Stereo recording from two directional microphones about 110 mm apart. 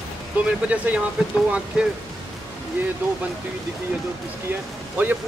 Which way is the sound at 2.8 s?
20° right (ahead or behind).